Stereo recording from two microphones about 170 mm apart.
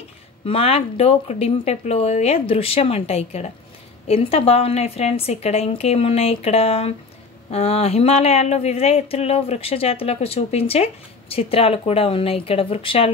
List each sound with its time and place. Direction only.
0.5 s speech: 35° left (ahead or behind)